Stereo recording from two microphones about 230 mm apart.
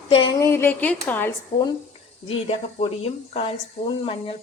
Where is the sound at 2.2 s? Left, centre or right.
Left.